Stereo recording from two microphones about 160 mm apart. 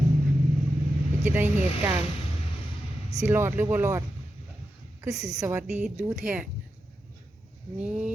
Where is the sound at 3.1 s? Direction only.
15° right (ahead or behind).